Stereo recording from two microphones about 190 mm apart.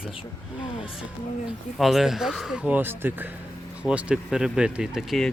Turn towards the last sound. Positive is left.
turn(degrees=0)  # may be behind; listen again after turning